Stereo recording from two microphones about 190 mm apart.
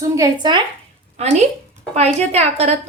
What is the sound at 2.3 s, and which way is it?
Speech, 35° right (ahead or behind).